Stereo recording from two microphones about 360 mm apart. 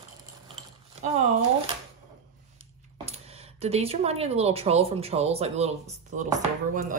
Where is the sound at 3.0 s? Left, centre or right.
Centre.